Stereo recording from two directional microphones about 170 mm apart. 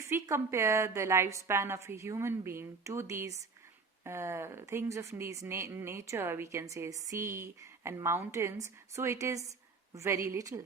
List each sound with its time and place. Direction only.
0.0 s speech: 15° right (ahead or behind)